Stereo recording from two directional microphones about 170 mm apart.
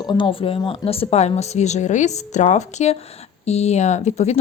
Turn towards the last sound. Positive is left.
turn(degrees=40)  # may be behind; listen again after turning